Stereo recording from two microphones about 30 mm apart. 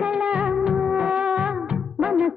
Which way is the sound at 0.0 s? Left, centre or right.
Right.